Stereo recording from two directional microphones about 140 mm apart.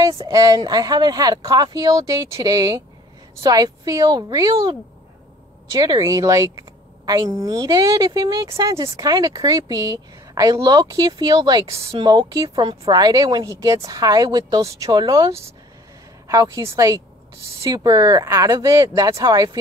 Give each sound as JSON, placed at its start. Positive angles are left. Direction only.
{"t": 0.0, "sound": "a woman's voice", "side_deg": -25}